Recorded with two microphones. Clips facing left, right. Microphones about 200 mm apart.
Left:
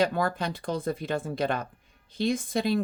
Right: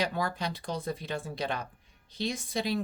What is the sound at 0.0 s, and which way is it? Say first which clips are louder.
Speech: left 5 dB; 55° left (ahead or behind).